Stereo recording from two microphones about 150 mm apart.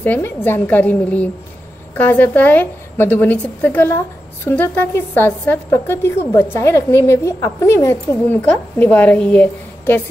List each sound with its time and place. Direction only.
0.0 s a woman's voice: 15° left (ahead or behind)